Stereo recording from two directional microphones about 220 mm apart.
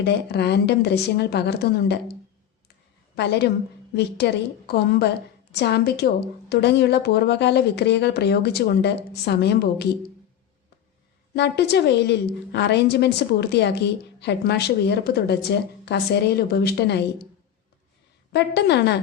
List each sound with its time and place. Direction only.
0.0 s a woman's voice: 50° left (ahead or behind)
3.2 s a woman's voice: 50° left (ahead or behind)
11.3 s a woman's voice: 50° left (ahead or behind)
18.3 s a woman's voice: 50° left (ahead or behind)